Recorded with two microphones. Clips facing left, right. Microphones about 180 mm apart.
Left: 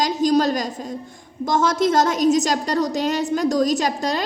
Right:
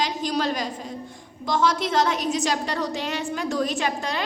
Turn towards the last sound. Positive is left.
turn(degrees=40)  # may be behind; listen again after turning